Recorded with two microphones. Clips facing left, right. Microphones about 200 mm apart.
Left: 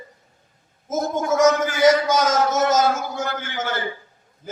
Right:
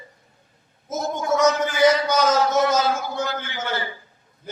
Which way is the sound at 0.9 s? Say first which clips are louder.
Left 2 dB; 50° left (ahead or behind).